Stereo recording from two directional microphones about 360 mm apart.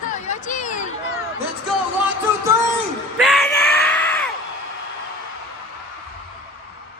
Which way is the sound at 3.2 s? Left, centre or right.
Centre.